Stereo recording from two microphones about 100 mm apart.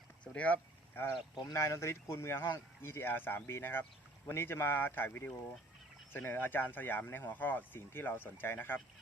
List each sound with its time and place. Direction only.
0.3 s speech: 15° left (ahead or behind)
1.5 s speech: 30° left (ahead or behind)